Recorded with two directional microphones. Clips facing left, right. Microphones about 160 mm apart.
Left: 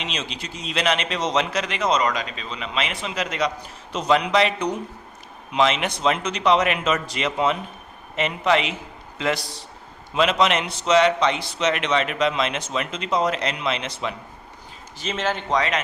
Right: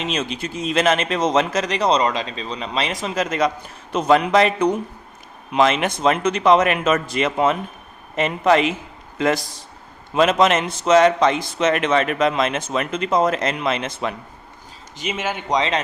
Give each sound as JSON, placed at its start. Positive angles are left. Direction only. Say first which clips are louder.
{"t": 0.0, "sound": "a man's voice", "louder": "right 7 dB", "side_deg": -50}
{"t": 14.9, "sound": "speech", "louder": "even", "side_deg": -10}